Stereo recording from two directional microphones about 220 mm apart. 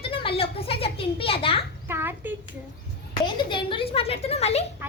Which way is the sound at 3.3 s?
20° left (ahead or behind).